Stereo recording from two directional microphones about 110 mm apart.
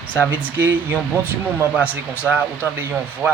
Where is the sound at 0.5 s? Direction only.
15° right (ahead or behind).